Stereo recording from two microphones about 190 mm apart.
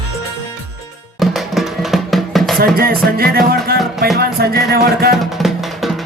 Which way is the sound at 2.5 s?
50° right (ahead or behind).